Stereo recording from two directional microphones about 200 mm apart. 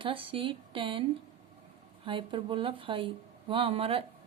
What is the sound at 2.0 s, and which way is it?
A woman's voice, 25° right (ahead or behind).